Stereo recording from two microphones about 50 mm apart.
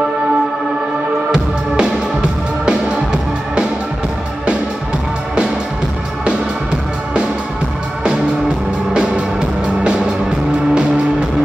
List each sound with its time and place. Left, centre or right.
2.6 s music: centre
8.9 s music: right
10.7 s music: centre